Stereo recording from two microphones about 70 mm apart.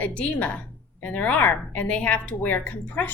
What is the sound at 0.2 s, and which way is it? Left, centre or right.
A woman's voice, left.